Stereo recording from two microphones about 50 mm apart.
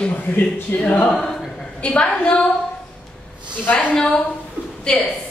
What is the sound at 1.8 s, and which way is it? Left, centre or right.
Speech, left.